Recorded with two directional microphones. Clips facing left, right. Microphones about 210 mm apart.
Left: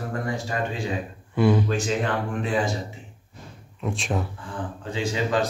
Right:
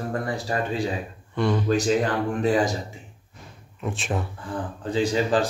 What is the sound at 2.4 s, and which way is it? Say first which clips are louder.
Speech: right 5 dB; 40° right (ahead or behind).